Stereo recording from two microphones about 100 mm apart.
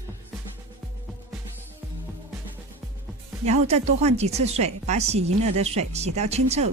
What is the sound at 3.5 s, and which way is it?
A woman's voice, 90° right.